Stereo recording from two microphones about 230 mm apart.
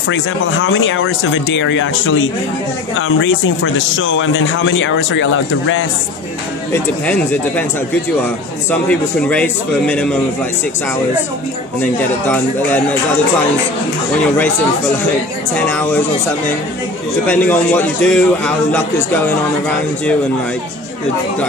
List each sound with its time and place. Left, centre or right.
0.1 s speech: left
6.7 s a man's voice: centre
11.8 s a man's voice: centre
15.5 s a man's voice: centre
17.3 s a man's voice: centre